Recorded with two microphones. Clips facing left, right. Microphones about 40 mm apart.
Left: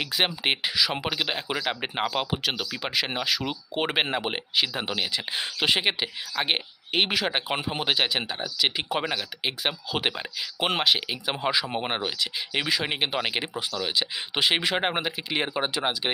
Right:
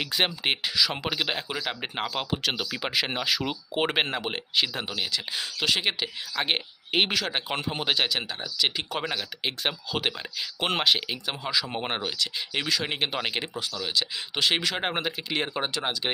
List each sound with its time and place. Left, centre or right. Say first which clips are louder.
0.0 s speech: left 1 dB; centre
4.9 s speech: left 2 dB; centre
6.3 s speech: left 1 dB; centre
11.4 s speech: left 3 dB; centre
11.7 s speech: left 2 dB; centre